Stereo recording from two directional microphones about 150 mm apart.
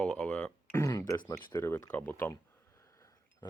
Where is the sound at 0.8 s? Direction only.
20° left (ahead or behind).